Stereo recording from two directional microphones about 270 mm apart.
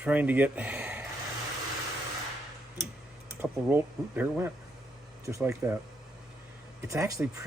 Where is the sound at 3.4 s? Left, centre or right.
Centre.